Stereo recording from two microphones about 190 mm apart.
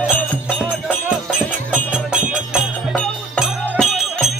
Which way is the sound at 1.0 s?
5° right (ahead or behind).